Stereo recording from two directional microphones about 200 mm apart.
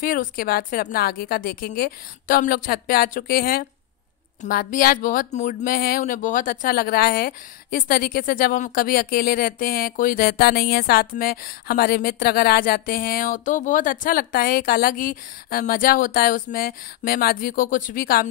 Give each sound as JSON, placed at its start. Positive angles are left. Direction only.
{"t": 0.0, "sound": "a woman's voice", "side_deg": 45}